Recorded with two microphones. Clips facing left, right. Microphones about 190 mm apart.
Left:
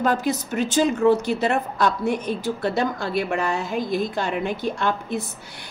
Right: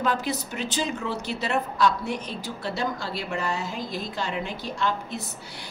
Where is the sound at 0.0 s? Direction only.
45° left (ahead or behind).